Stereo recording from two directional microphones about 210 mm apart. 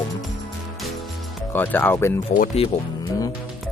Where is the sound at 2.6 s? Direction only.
30° left (ahead or behind).